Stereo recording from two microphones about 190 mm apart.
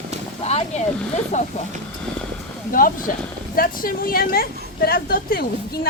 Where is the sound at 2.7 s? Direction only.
45° left (ahead or behind).